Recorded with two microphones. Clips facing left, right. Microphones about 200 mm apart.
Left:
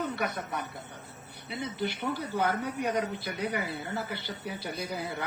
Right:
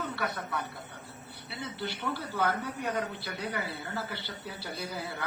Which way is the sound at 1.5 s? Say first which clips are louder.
Left 4 dB; 15° left (ahead or behind).